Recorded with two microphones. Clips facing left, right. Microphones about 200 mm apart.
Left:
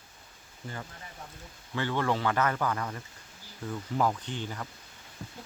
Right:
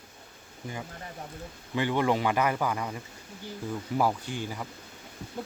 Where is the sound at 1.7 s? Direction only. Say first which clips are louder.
Right 3 dB; 15° right (ahead or behind).